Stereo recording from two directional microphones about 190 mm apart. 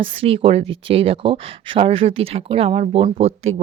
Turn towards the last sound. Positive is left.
turn(degrees=-30)  # may be behind; listen again after turning